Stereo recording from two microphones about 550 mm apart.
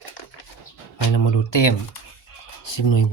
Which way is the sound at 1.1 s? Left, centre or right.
Left.